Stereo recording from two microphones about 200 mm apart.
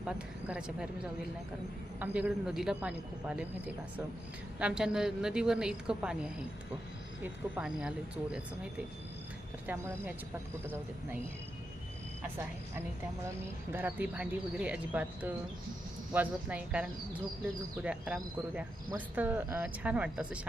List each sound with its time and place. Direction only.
0.0 s a woman's voice: 5° right (ahead or behind)
2.0 s a woman's voice: 5° right (ahead or behind)
4.6 s a woman's voice: 5° right (ahead or behind)
9.6 s speech: 10° right (ahead or behind)
13.7 s a woman's voice: 10° right (ahead or behind)